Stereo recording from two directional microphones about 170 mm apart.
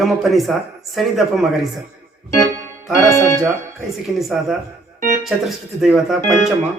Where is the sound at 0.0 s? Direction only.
Centre (ahead or behind).